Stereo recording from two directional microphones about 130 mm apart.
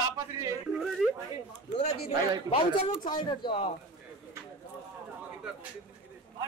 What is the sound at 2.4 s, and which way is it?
Speech, 45° left (ahead or behind).